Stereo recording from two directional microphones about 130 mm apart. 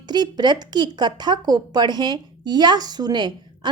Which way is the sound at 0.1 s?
35° right (ahead or behind).